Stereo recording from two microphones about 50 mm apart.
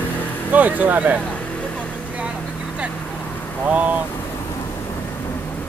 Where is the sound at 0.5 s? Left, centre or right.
Right.